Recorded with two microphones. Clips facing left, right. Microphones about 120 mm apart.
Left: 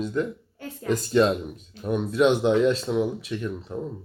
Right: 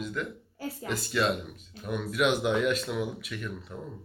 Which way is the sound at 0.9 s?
35° left (ahead or behind).